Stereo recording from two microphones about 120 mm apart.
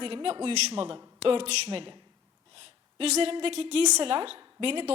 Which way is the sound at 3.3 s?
50° right (ahead or behind).